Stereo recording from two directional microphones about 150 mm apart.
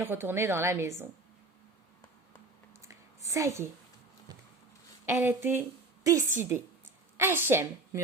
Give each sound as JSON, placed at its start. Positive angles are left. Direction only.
{"t": 0.0, "sound": "a woman's voice", "side_deg": -15}
{"t": 2.8, "sound": "a sound", "side_deg": -20}
{"t": 5.0, "sound": "a woman's voice", "side_deg": -15}